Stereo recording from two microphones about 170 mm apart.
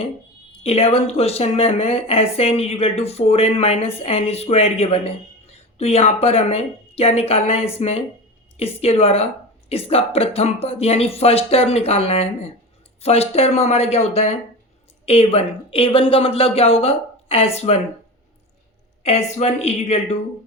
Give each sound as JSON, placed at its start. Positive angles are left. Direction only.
{"t": 0.6, "sound": "speech", "side_deg": 35}
{"t": 19.0, "sound": "a woman's voice", "side_deg": 35}